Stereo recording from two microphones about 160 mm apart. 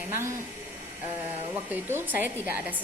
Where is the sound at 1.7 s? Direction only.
10° right (ahead or behind).